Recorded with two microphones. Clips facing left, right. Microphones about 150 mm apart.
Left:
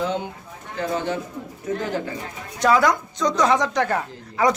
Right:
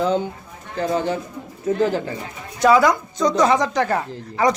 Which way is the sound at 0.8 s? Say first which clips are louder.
Right 3 dB; 35° right (ahead or behind).